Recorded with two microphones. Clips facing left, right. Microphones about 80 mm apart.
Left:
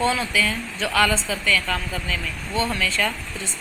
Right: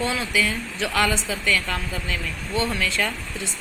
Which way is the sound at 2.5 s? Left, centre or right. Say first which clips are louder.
Left 1 dB; left.